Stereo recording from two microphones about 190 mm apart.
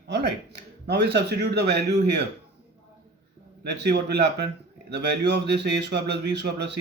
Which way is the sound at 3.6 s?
60° right (ahead or behind).